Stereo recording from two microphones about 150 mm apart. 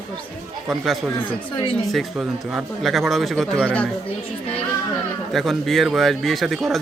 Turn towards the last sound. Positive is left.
turn(degrees=0)  # may be behind; listen again after turning